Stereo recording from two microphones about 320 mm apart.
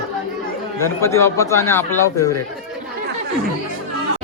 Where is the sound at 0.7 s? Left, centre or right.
Centre.